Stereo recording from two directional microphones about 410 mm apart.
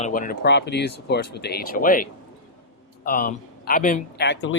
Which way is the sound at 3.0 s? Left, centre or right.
Left.